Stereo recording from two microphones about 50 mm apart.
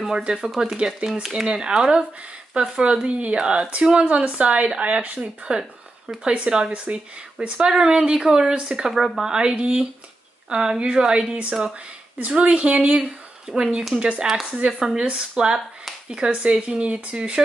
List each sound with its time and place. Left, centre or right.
0.1 s speech: centre
13.9 s speech: right
14.2 s speech: centre